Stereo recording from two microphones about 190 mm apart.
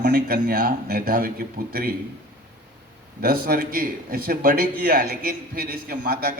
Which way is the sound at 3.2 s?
50° right (ahead or behind).